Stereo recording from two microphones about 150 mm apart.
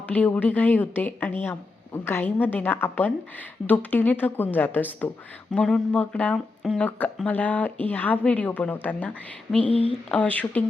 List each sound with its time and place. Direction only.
0.0 s speech: 10° left (ahead or behind)